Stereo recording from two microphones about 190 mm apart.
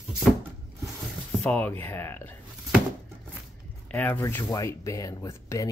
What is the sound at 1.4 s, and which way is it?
Speech, 5° left (ahead or behind).